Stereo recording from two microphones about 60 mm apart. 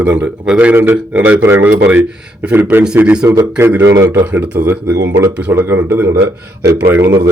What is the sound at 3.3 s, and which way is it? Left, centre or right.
Speech, right.